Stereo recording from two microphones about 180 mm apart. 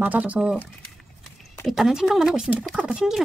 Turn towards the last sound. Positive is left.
turn(degrees=-5)  # may be behind; listen again after turning